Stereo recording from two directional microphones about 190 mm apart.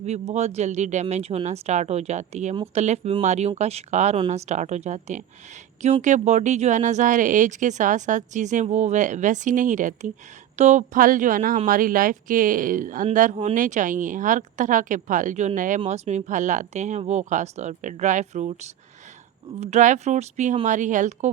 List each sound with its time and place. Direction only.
0.0 s speech: 35° right (ahead or behind)